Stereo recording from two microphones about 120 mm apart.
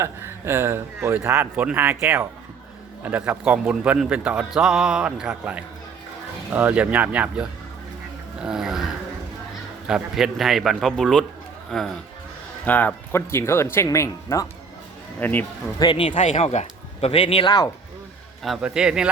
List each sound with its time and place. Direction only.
0.0 s a man's voice: 20° right (ahead or behind)
8.4 s snoring: 5° right (ahead or behind)
9.8 s a man's voice: 5° right (ahead or behind); by 15.4 s 15° left (ahead or behind)
15.8 s speech: 45° left (ahead or behind)
16.1 s speech: 80° left; by 17.5 s 50° left (ahead or behind)
18.4 s a man's voice: 5° right (ahead or behind)